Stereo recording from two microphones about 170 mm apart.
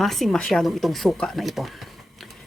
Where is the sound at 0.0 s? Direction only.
Centre (ahead or behind).